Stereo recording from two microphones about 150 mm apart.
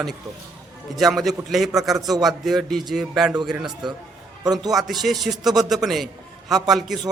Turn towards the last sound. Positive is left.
turn(degrees=0)  # may be behind; listen again after turning